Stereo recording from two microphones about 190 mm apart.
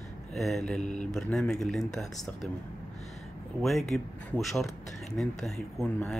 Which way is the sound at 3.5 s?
Centre (ahead or behind).